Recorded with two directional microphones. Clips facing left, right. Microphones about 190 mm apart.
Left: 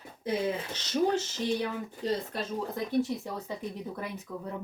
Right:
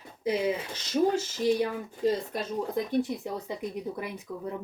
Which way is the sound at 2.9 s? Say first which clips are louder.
Right 1 dB; 15° right (ahead or behind).